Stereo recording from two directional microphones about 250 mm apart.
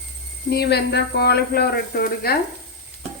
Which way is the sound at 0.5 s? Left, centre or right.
Left.